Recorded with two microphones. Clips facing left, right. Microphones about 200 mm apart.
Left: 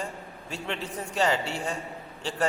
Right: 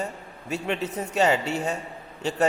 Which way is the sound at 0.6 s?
20° right (ahead or behind).